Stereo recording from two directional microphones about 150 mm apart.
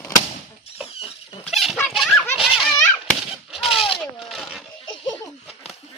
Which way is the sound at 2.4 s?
5° right (ahead or behind).